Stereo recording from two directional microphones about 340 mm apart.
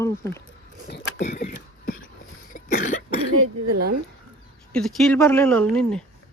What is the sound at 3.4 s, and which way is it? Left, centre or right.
Speech, right.